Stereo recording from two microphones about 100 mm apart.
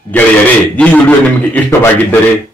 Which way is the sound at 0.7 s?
15° left (ahead or behind).